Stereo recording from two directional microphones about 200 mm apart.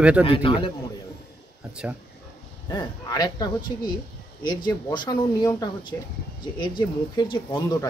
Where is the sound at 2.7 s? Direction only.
20° left (ahead or behind).